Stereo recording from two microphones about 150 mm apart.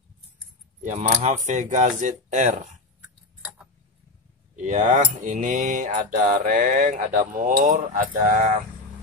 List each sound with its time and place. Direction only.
0.8 s mantra: 50° right (ahead or behind)
4.6 s mantra: 55° right (ahead or behind)